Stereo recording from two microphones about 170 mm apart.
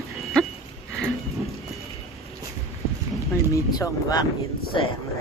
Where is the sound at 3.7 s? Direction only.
20° left (ahead or behind).